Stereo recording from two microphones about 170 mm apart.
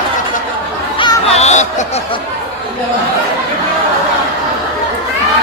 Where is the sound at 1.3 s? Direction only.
40° left (ahead or behind).